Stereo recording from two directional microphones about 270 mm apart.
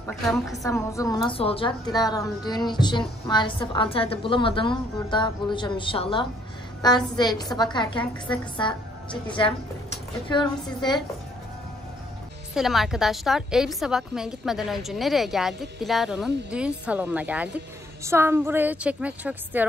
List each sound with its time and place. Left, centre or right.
0.0 s a woman's voice: centre
0.6 s a woman's voice: centre
12.5 s a woman's voice: centre